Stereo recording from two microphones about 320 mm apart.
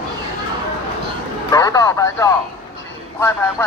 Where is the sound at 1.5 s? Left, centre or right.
Centre.